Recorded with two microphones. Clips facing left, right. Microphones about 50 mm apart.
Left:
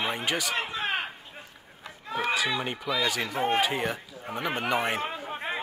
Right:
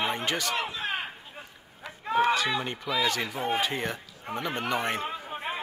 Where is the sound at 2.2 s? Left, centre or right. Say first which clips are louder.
Even; centre.